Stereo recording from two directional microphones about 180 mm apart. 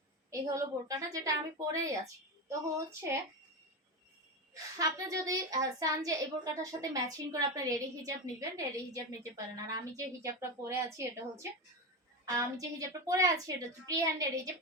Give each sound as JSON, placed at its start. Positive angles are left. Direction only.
{"t": 0.3, "sound": "a woman's voice", "side_deg": -20}
{"t": 4.5, "sound": "a woman's voice", "side_deg": -20}